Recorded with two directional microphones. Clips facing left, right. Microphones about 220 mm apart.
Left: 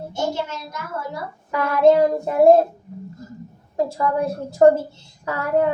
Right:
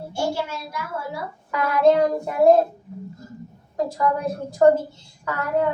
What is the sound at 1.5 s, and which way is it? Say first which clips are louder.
Child singing: left 2 dB; 25° left (ahead or behind).